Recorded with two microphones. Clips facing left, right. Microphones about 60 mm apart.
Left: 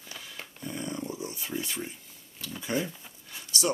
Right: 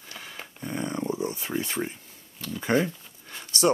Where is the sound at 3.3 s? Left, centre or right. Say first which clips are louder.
Right 6 dB; right.